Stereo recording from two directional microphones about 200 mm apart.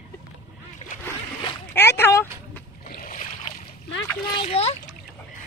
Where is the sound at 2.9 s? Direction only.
40° left (ahead or behind).